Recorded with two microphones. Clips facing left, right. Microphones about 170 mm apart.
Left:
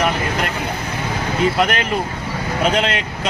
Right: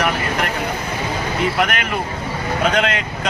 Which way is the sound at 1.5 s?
30° left (ahead or behind).